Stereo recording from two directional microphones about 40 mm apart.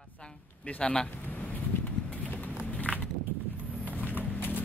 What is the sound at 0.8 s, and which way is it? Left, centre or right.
Speech, left.